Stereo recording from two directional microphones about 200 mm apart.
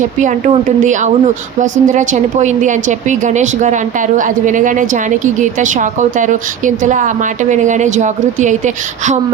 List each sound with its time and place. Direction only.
0.2 s a woman's voice: 40° right (ahead or behind)